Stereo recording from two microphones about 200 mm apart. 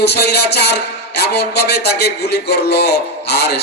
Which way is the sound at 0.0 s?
55° left (ahead or behind).